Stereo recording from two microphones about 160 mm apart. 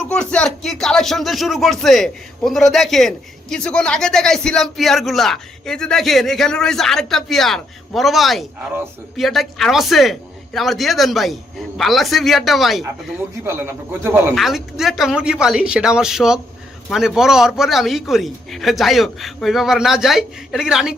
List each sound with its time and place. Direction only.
0.1 s speech: 5° left (ahead or behind)
13.4 s speech: 15° right (ahead or behind)
14.3 s speech: centre (ahead or behind)